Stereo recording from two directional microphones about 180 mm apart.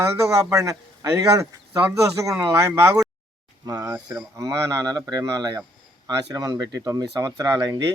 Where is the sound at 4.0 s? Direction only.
Centre (ahead or behind).